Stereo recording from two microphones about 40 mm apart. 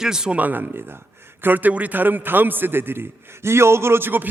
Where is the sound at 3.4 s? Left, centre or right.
Right.